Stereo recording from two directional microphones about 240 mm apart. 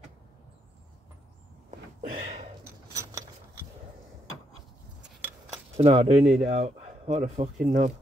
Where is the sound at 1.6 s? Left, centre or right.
Right.